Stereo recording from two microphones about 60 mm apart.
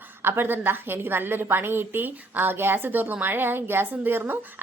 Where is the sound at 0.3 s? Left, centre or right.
Right.